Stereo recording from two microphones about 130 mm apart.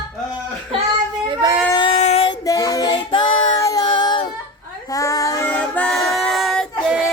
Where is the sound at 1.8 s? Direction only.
40° left (ahead or behind).